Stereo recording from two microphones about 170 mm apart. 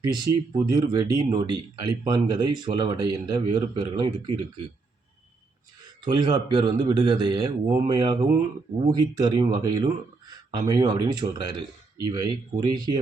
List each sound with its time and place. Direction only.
0.1 s speech: 25° right (ahead or behind)
6.1 s speech: 25° right (ahead or behind)